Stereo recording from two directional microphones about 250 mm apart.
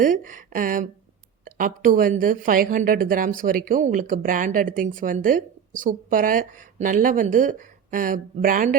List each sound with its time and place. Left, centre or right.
0.0 s a woman's voice: right